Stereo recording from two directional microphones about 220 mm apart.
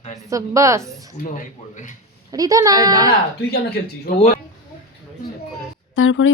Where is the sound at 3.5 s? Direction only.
45° left (ahead or behind).